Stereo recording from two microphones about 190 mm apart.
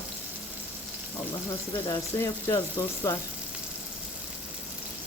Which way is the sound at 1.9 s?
15° left (ahead or behind).